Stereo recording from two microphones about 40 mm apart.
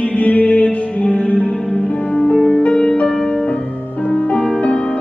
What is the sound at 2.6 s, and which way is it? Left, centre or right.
Music, left.